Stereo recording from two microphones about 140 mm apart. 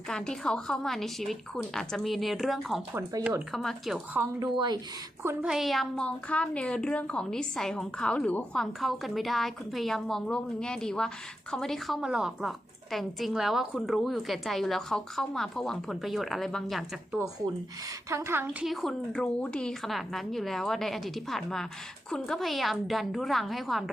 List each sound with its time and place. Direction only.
0.1 s a woman's voice: 5° left (ahead or behind)
2.9 s speech: 25° right (ahead or behind)
3.5 s a woman's voice: centre (ahead or behind)
4.1 s speech: 15° right (ahead or behind)
4.5 s speech: 30° right (ahead or behind)
5.2 s speech: 20° right (ahead or behind)
5.5 s a woman's voice: centre (ahead or behind)
18.1 s speech: 20° right (ahead or behind)
18.6 s a woman's voice: centre (ahead or behind)